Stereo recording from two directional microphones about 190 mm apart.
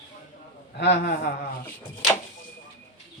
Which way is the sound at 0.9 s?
45° left (ahead or behind).